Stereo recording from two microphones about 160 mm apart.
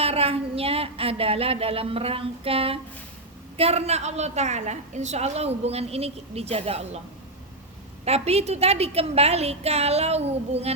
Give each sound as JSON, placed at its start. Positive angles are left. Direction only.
{"t": 0.0, "sound": "a woman's voice", "side_deg": -40}
{"t": 8.0, "sound": "a woman's voice", "side_deg": -40}